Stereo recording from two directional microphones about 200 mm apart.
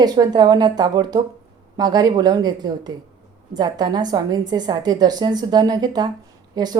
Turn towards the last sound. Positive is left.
turn(degrees=-20)  # may be behind; listen again after turning